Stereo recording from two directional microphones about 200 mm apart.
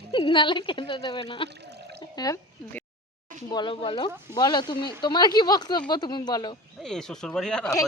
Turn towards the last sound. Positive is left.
turn(degrees=5)  # may be behind; listen again after turning